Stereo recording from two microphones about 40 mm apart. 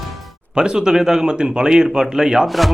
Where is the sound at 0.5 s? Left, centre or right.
Right.